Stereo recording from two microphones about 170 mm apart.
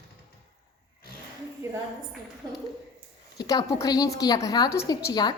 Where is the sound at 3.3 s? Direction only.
20° left (ahead or behind).